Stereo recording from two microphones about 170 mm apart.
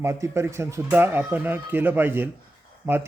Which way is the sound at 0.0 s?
15° right (ahead or behind).